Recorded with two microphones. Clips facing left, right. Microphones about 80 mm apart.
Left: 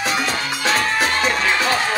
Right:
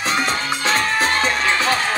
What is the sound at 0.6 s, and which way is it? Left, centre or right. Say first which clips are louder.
Music: even; right.